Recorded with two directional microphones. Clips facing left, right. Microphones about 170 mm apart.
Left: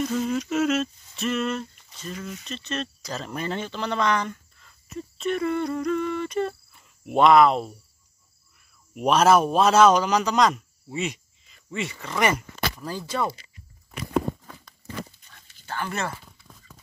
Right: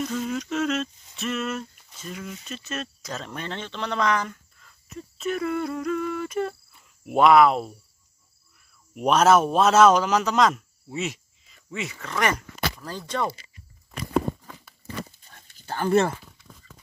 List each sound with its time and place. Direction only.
0.0 s a sound: centre (ahead or behind)
7.1 s a man's voice: 5° right (ahead or behind)
8.9 s a man's voice: centre (ahead or behind)
15.2 s dog: 40° right (ahead or behind)